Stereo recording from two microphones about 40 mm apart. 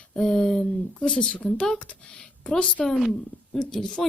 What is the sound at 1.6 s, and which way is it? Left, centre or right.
Speech, centre.